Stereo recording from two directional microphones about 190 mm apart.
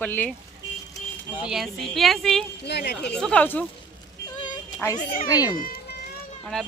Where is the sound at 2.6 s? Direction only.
60° left (ahead or behind).